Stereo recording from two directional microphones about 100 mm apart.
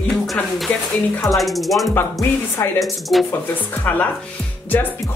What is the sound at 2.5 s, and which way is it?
Speech, 25° left (ahead or behind).